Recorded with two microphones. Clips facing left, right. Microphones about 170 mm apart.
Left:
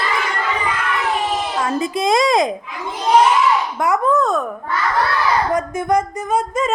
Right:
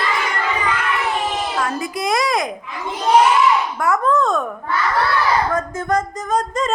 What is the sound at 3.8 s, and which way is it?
Babbling, 15° left (ahead or behind).